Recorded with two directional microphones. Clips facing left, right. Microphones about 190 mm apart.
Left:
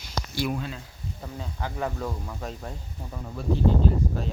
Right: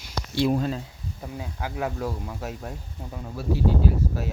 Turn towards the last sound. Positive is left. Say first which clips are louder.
# even
turn(degrees=-5)  # may be behind; listen again after turning